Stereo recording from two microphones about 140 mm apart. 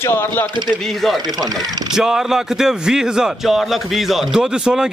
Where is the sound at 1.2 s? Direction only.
30° right (ahead or behind).